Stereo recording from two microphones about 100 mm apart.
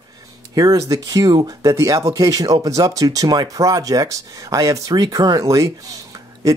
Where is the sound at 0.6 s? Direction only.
40° right (ahead or behind).